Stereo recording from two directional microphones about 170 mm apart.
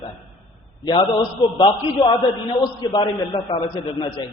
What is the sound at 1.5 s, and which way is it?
A man's voice, 30° left (ahead or behind).